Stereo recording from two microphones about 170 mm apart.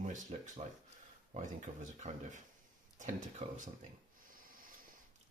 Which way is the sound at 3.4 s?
45° right (ahead or behind).